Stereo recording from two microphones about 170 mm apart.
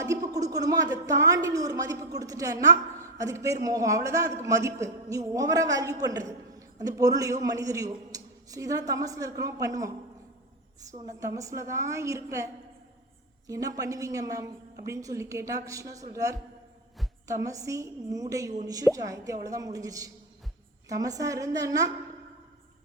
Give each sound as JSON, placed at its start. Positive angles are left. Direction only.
{"t": 0.0, "sound": "a woman's voice", "side_deg": -20}
{"t": 11.0, "sound": "a woman's voice", "side_deg": -20}
{"t": 13.5, "sound": "a woman's voice", "side_deg": -20}